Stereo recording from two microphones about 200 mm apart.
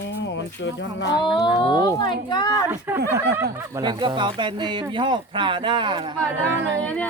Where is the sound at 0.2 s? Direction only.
65° left (ahead or behind).